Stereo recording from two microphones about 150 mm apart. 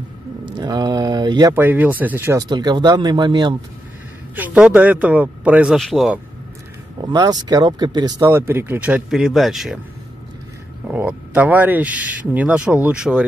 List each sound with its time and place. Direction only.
0.6 s speech: 25° right (ahead or behind)
1.5 s speech: 15° right (ahead or behind)
2.5 s speech: 30° right (ahead or behind)
4.4 s speech: 10° right (ahead or behind)
7.1 s speech: 25° right (ahead or behind); by 9.8 s centre (ahead or behind)
10.9 s speech: 10° right (ahead or behind)